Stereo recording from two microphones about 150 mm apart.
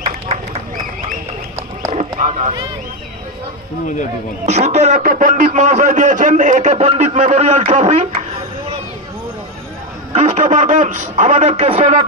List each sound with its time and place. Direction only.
1.9 s a sound: 50° right (ahead or behind)
4.5 s a man's voice: 50° right (ahead or behind)
10.1 s a man's voice: 50° right (ahead or behind)